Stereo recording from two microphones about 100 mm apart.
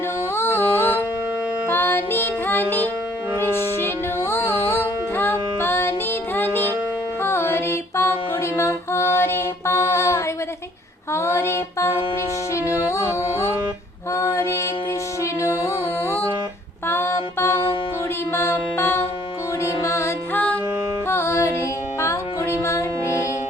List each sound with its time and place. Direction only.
0.3 s music: 25° left (ahead or behind)
11.1 s a sound: 25° left (ahead or behind)
12.5 s yodeling: 30° left (ahead or behind)
14.1 s mantra: 30° left (ahead or behind)
15.2 s music: 30° left (ahead or behind)
20.3 s music: 15° left (ahead or behind)
21.1 s music: 25° left (ahead or behind)